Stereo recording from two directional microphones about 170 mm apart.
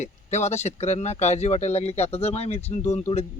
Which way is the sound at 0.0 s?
40° left (ahead or behind).